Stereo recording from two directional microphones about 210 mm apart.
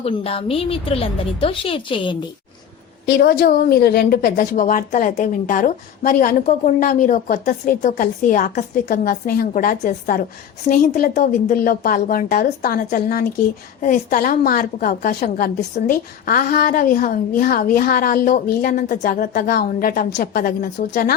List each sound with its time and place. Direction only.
0.0 s a woman's voice: 25° left (ahead or behind)
3.1 s a woman's voice: 50° left (ahead or behind)